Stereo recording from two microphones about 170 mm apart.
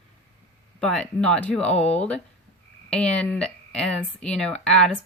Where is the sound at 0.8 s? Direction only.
5° left (ahead or behind).